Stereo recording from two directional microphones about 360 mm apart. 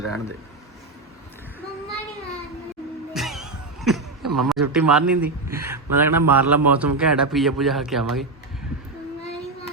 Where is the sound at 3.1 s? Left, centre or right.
Centre.